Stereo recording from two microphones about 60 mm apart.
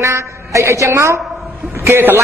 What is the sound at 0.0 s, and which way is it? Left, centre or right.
A woman's voice, right.